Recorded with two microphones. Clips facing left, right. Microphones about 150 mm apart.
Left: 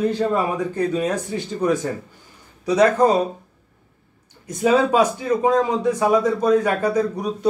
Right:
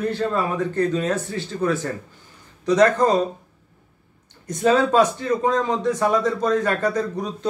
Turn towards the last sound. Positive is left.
turn(degrees=10)  # may be behind; listen again after turning